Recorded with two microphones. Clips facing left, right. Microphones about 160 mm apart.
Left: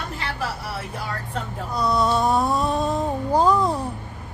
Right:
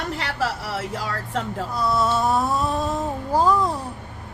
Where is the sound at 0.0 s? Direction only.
80° right.